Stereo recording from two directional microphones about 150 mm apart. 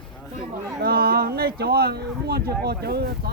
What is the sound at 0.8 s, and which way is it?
Speech, 90° right.